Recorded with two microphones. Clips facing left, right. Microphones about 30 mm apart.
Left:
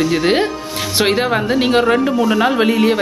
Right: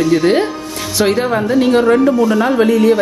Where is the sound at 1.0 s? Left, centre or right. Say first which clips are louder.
Right 2 dB; left.